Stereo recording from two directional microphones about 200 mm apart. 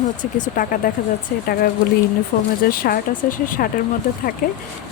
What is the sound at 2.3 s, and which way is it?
A woman's voice, 45° left (ahead or behind).